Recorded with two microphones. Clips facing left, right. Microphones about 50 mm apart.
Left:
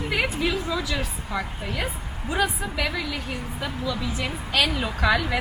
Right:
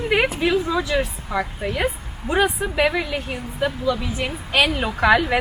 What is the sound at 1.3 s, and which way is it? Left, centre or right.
Speech, centre.